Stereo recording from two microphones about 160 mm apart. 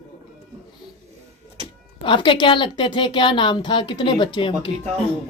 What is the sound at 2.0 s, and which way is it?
A woman's voice, 30° left (ahead or behind).